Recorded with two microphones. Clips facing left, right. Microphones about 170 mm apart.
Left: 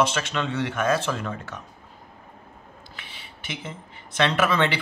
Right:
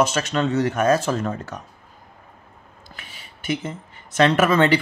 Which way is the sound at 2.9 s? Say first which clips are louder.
Right 4 dB; 45° right (ahead or behind).